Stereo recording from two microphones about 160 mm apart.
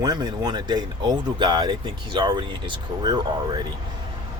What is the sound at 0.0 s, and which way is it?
Speech, 25° right (ahead or behind).